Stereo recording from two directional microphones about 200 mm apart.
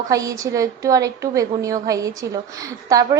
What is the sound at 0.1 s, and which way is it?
A woman's voice, 15° right (ahead or behind).